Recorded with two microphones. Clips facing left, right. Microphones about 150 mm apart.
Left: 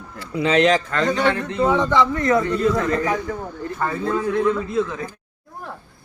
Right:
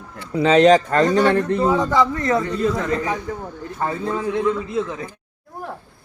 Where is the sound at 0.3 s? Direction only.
35° right (ahead or behind).